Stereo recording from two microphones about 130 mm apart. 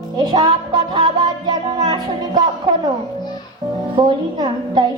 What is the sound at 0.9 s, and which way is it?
Music, 35° right (ahead or behind).